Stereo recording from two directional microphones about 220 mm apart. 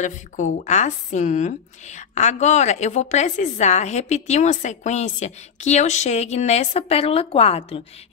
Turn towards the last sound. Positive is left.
turn(degrees=25)  # may be behind; listen again after turning